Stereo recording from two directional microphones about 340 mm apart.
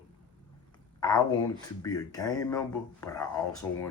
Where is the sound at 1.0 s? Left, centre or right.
Centre.